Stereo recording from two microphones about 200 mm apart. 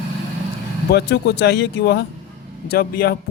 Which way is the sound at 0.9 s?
55° left (ahead or behind).